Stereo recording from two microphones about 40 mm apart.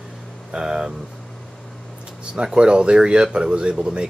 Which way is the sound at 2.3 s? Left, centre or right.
Right.